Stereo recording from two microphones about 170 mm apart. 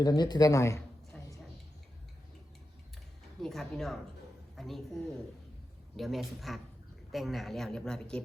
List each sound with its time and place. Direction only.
0.0 s speech: 25° left (ahead or behind)
1.1 s music: centre (ahead or behind)
3.4 s speech: centre (ahead or behind)